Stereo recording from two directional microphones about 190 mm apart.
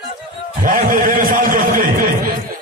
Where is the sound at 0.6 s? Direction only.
45° right (ahead or behind).